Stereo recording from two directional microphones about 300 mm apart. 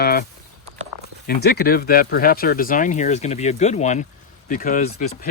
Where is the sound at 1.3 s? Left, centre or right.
Left.